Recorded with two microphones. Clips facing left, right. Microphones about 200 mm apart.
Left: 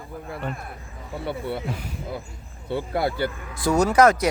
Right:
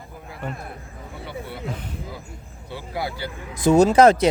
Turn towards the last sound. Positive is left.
turn(degrees=-25)  # may be behind; listen again after turning